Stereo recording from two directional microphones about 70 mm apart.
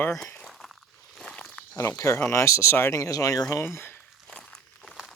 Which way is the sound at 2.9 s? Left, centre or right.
Left.